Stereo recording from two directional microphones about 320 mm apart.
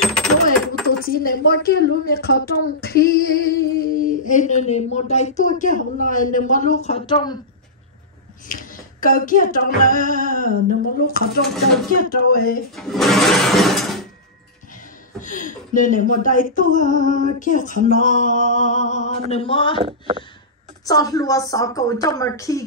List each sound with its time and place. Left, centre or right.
0.0 s coin: centre
0.8 s speech: left
8.5 s speech: left
12.7 s a sound: centre
15.1 s speech: left
19.8 s speech: centre
20.8 s a woman's voice: centre